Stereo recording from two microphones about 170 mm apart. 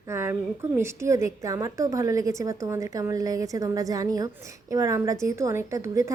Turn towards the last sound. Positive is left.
turn(degrees=-20)  # may be behind; listen again after turning